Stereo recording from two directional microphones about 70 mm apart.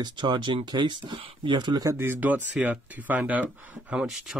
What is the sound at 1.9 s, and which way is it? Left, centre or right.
Speech, right.